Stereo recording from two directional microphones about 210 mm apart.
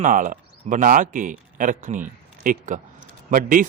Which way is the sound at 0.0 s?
40° right (ahead or behind).